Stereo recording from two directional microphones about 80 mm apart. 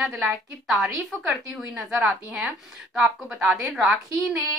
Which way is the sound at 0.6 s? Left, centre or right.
Centre.